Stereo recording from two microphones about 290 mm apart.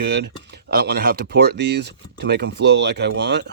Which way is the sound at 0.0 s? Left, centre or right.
Right.